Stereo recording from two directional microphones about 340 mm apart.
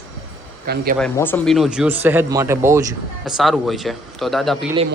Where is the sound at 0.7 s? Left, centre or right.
Right.